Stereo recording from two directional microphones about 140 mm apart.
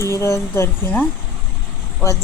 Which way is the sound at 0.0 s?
20° left (ahead or behind).